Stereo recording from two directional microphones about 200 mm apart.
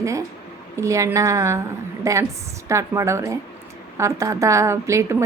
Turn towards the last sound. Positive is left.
turn(degrees=-15)  # may be behind; listen again after turning